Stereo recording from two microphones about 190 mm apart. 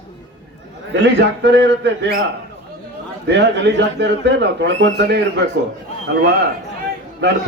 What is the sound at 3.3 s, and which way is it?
Speech, 65° right (ahead or behind).